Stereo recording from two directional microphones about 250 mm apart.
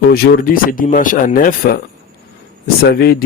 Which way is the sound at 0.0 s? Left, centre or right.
Left.